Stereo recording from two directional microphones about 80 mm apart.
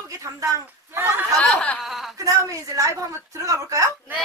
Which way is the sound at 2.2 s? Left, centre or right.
Right.